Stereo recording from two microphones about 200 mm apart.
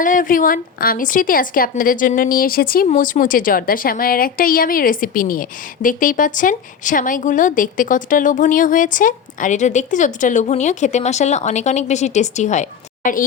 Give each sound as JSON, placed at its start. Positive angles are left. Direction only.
{"t": 0.0, "sound": "a woman's voice", "side_deg": 40}